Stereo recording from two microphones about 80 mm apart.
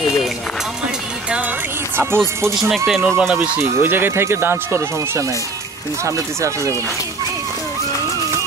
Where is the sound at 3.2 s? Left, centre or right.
Centre; by 6.7 s right.